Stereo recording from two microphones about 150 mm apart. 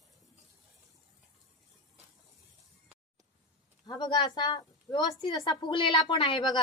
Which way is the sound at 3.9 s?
30° left (ahead or behind).